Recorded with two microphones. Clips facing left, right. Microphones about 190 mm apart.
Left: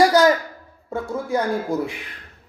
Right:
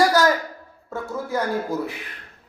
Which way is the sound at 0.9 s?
15° left (ahead or behind).